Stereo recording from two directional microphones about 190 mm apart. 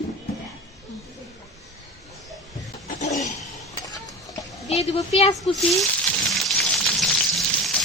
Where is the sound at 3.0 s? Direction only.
40° left (ahead or behind).